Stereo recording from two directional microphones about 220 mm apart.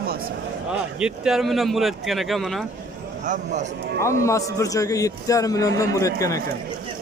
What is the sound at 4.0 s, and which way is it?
A man's voice, 15° left (ahead or behind).